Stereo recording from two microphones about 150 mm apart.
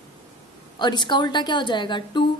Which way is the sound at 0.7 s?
30° left (ahead or behind).